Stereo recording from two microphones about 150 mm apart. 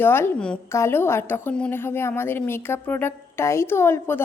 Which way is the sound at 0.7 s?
15° left (ahead or behind).